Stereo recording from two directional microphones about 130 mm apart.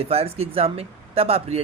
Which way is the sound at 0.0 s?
50° right (ahead or behind).